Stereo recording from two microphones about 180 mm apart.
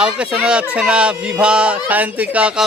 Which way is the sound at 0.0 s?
5° right (ahead or behind).